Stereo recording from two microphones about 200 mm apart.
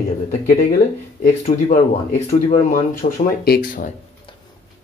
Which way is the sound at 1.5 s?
30° left (ahead or behind).